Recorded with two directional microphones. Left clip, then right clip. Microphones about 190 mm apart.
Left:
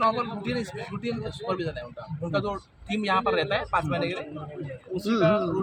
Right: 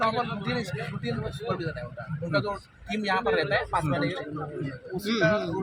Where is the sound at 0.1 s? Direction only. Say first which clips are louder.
Even; 10° left (ahead or behind).